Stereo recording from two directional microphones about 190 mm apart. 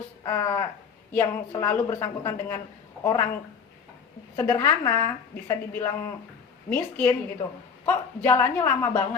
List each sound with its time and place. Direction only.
0.2 s a woman's voice: 15° left (ahead or behind)
4.4 s a woman's voice: 15° left (ahead or behind)